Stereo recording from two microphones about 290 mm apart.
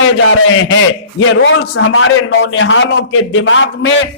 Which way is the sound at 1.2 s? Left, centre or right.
Left.